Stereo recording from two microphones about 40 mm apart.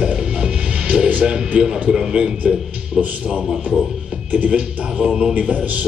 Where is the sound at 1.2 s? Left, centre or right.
Right.